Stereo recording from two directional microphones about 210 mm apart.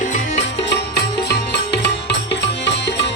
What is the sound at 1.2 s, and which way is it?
Music, 55° left (ahead or behind).